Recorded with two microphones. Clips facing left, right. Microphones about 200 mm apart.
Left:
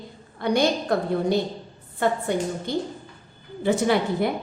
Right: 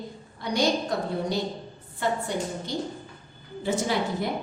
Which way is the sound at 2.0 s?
55° left (ahead or behind).